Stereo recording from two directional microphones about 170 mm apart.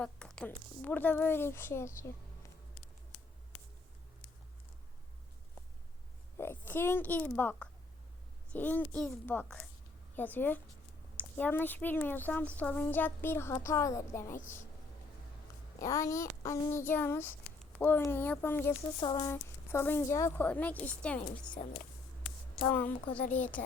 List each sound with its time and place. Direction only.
0.0 s a woman's voice: 5° left (ahead or behind)
6.3 s speech: 10° left (ahead or behind)
15.8 s speech: 20° left (ahead or behind)
19.0 s speech: 30° left (ahead or behind)
19.3 s speech: 15° left (ahead or behind)